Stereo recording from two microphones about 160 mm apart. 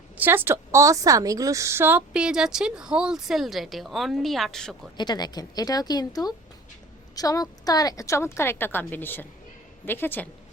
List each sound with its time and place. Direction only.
0.2 s a woman's voice: 15° right (ahead or behind)
4.9 s a woman's voice: 25° left (ahead or behind)